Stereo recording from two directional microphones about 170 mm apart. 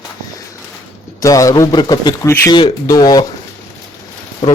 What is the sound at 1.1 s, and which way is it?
Speech, 20° left (ahead or behind).